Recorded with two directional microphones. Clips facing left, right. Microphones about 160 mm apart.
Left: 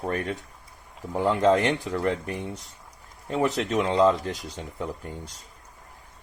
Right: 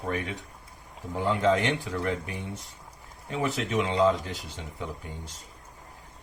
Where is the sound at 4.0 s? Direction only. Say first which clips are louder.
Left 3 dB; 45° left (ahead or behind).